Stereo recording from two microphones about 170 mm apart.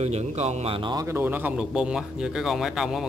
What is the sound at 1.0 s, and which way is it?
Speech, 10° right (ahead or behind).